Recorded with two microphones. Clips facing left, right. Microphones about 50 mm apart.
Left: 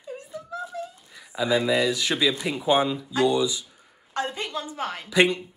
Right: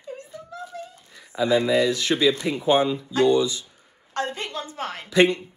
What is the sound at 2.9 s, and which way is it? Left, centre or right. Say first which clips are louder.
Speech: right 2 dB; centre.